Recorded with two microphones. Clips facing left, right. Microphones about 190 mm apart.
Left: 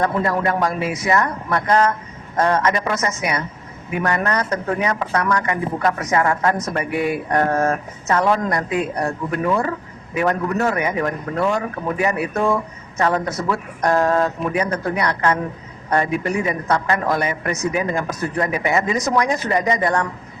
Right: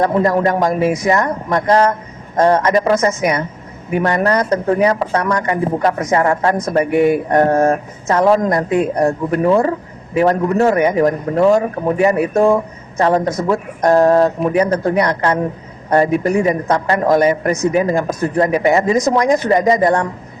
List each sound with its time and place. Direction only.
0.0 s a man's voice: 35° right (ahead or behind)